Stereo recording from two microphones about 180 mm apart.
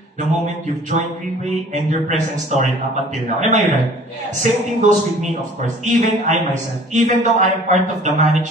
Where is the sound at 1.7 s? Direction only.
40° right (ahead or behind).